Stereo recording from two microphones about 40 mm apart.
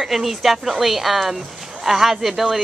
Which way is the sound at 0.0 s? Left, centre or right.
Centre.